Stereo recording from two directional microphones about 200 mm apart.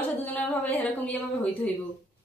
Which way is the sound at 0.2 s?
10° left (ahead or behind).